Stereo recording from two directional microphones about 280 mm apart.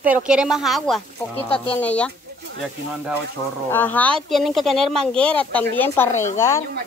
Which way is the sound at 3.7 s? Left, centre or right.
Centre.